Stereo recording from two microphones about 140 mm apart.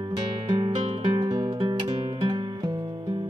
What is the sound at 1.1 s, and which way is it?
Music, 25° right (ahead or behind).